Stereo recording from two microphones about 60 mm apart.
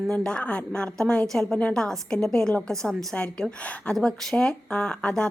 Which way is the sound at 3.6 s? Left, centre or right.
Left.